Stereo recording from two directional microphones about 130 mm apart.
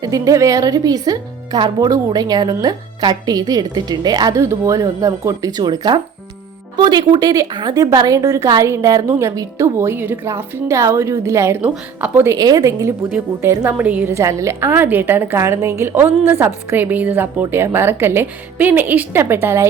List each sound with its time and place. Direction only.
0.0 s a woman's voice: 25° right (ahead or behind)
13.1 s a woman's voice: 15° right (ahead or behind)